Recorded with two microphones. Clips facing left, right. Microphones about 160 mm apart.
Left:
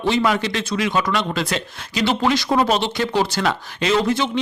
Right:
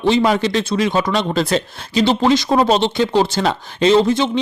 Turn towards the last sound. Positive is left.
turn(degrees=-25)  # may be behind; listen again after turning